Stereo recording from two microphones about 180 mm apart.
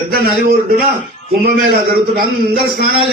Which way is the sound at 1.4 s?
60° right (ahead or behind).